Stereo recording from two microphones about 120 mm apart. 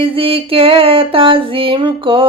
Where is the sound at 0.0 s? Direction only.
50° right (ahead or behind).